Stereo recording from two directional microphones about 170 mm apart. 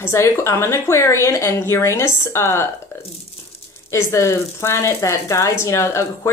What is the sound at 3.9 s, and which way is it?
Speech, 15° left (ahead or behind).